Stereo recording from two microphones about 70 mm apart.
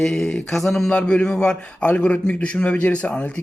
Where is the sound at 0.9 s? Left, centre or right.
Centre.